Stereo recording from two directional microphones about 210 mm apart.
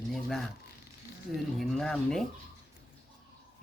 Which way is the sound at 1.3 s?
Centre (ahead or behind).